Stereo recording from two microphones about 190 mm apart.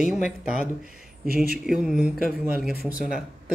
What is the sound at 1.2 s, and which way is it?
Speech, 50° right (ahead or behind).